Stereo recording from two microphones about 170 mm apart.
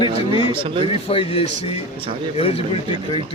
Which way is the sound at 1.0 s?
35° left (ahead or behind).